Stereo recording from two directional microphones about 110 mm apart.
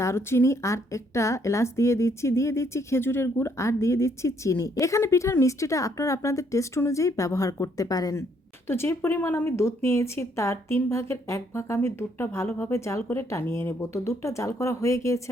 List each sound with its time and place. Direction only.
0.0 s speech: 25° left (ahead or behind)
8.6 s speech: 25° left (ahead or behind)